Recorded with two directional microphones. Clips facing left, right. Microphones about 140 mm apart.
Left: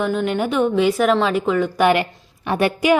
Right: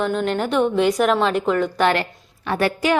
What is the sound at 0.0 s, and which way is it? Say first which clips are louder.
A woman's voice: left 1 dB; 5° left (ahead or behind).